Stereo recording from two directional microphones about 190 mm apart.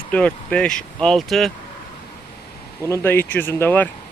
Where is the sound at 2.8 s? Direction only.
15° left (ahead or behind).